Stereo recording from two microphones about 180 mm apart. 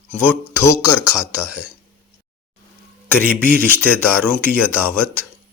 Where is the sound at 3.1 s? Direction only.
10° left (ahead or behind).